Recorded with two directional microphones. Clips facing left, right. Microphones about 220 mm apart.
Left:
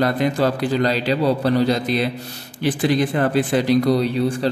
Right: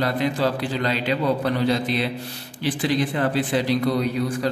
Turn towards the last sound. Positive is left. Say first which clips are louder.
# left 3 dB
turn(degrees=30)  # may be behind; listen again after turning